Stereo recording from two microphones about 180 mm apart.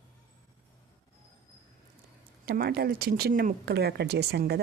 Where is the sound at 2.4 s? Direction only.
55° right (ahead or behind).